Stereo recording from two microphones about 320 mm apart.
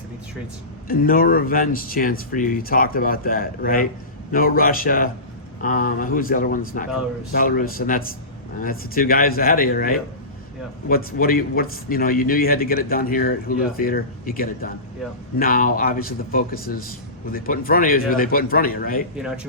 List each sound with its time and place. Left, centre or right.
0.9 s a man's voice: left